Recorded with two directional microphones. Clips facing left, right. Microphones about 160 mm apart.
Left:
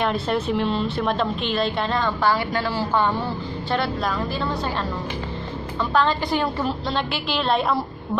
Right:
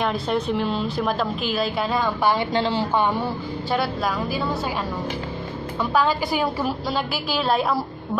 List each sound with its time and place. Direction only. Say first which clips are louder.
0.0 s a woman's voice: even; centre (ahead or behind)
2.3 s a woman's voice: right 2 dB; 20° right (ahead or behind)
3.7 s a woman's voice: even; 5° right (ahead or behind)
5.8 s a woman's voice: even; 5° right (ahead or behind)